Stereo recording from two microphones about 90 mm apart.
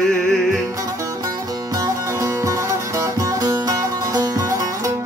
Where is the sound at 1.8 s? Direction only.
35° right (ahead or behind).